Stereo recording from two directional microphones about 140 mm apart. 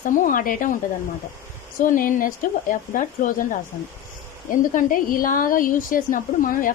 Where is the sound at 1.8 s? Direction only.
70° left (ahead or behind).